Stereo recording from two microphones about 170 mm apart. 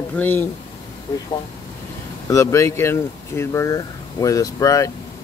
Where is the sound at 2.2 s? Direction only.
20° left (ahead or behind).